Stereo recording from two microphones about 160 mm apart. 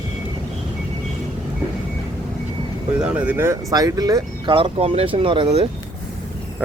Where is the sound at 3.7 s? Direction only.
25° right (ahead or behind).